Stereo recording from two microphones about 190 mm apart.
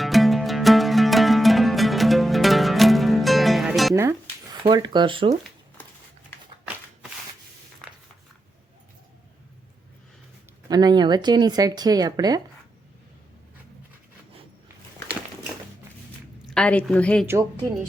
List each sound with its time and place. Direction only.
0.0 s music: centre (ahead or behind)
4.6 s speech: 25° right (ahead or behind)
5.8 s a sound: 10° left (ahead or behind)
10.7 s speech: 20° right (ahead or behind)
16.4 s a woman's voice: 5° left (ahead or behind)